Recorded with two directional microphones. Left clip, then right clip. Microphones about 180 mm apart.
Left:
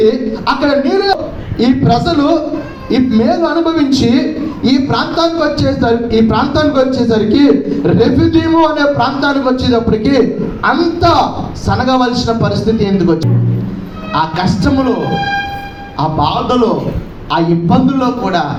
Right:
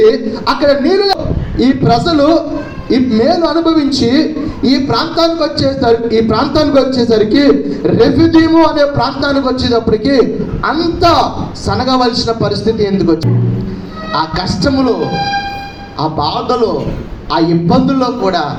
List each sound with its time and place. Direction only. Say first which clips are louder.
0.1 s a man's voice: right 1 dB; 40° right (ahead or behind)
1.5 s a man's voice: right 1 dB; 60° right (ahead or behind); by 14.9 s 40° right (ahead or behind)
16.0 s a man's voice: left 1 dB; 40° right (ahead or behind)